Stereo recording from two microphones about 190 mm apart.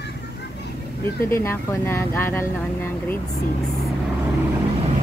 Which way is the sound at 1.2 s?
15° left (ahead or behind).